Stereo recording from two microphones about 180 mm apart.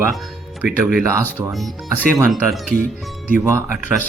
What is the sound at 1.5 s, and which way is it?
Speech, centre (ahead or behind).